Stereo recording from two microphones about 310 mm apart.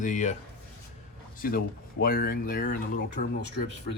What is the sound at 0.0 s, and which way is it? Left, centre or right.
Speech, left.